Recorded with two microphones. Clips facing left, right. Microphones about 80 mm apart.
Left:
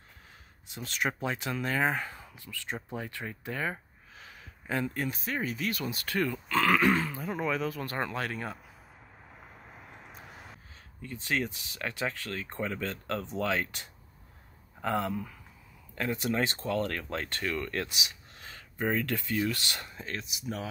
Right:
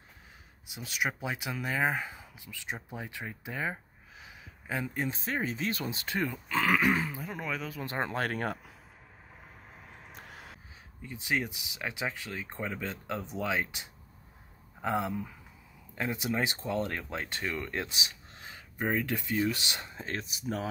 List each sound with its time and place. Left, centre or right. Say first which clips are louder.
0.7 s speech: left 1 dB; centre
4.9 s speech: even; right
7.2 s speech: left 5 dB; centre
7.8 s speech: even; right
8.1 s speech: right 3 dB; right
11.0 s speech: even; centre
17.9 s a sound: even; right
18.5 s speech: left 1 dB; centre
20.2 s speech: right 2 dB; right